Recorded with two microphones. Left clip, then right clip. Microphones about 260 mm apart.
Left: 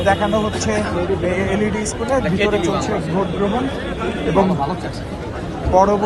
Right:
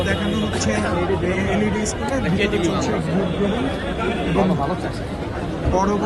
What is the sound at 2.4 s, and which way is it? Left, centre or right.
Speech, centre.